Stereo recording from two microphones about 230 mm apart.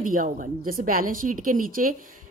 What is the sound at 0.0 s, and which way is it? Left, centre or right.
A woman's voice, right.